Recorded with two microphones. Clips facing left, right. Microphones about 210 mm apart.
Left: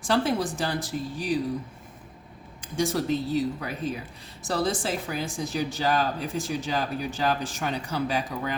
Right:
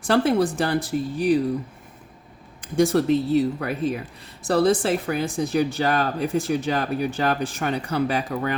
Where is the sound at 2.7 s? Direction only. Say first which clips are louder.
Right 7 dB; 60° right (ahead or behind).